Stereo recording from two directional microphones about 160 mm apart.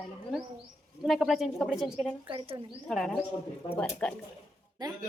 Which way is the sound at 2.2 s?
35° right (ahead or behind).